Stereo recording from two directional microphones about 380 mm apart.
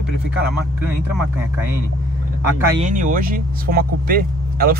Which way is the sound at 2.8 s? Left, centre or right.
Right.